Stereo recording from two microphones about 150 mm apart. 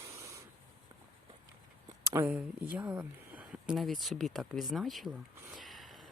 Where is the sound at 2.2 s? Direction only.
10° right (ahead or behind).